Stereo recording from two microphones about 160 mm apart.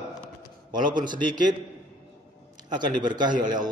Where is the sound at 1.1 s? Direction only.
30° right (ahead or behind).